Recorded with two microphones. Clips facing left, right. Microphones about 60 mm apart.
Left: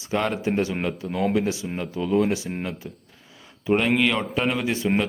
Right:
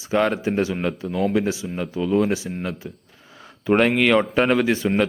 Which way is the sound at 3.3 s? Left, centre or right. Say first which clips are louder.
Right 2 dB; right.